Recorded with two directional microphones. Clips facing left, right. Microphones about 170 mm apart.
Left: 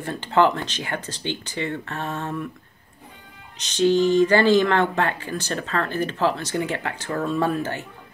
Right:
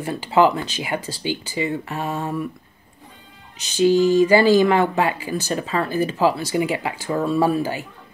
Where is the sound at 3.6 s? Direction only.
10° right (ahead or behind).